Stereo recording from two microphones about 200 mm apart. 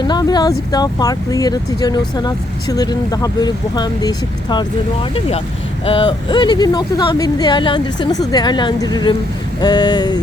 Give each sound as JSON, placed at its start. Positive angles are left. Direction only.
{"t": 0.1, "sound": "speech", "side_deg": 20}
{"t": 5.8, "sound": "speech", "side_deg": 25}